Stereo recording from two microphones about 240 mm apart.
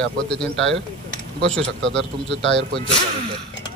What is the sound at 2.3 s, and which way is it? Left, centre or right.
Speech, left.